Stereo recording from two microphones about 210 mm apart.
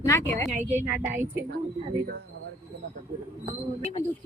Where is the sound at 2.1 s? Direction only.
50° right (ahead or behind).